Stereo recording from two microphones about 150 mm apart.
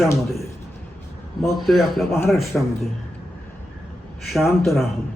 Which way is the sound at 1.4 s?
Centre (ahead or behind).